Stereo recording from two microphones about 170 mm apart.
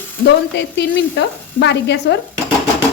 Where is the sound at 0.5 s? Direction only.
90° left.